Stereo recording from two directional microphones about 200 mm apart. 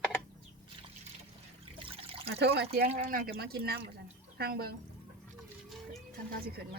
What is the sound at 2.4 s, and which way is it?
Speech, 55° right (ahead or behind).